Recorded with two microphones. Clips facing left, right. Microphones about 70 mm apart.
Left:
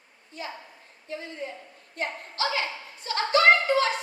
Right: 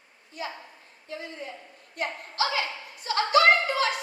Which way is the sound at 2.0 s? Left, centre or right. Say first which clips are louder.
Right 1 dB; left.